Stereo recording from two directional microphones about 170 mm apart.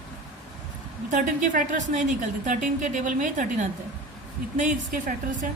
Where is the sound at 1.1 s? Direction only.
50° right (ahead or behind).